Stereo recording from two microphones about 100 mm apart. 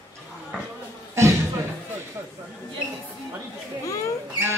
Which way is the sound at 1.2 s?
30° right (ahead or behind).